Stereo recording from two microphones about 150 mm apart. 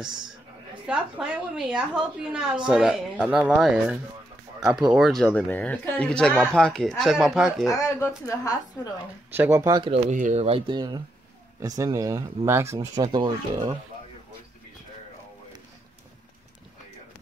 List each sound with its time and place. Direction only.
0.8 s a woman's voice: 5° right (ahead or behind)
7.7 s a woman's voice: 20° left (ahead or behind)
9.3 s speech: 15° right (ahead or behind)
9.8 s speech: 40° right (ahead or behind)
10.1 s speech: 50° right (ahead or behind)
10.7 s speech: 30° right (ahead or behind)